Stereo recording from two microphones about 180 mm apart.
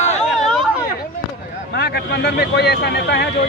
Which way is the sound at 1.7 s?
65° left (ahead or behind).